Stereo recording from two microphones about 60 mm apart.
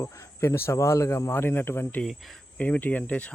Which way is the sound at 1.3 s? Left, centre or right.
Left.